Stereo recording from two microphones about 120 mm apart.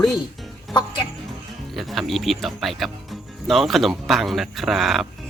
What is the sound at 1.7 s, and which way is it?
Speech, centre (ahead or behind).